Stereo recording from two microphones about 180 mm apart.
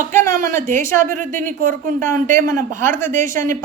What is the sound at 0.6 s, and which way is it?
Speech, 45° right (ahead or behind).